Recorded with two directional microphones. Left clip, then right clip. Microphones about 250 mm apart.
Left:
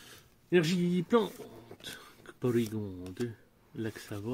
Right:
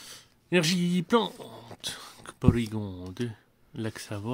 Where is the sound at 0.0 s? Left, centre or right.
Right.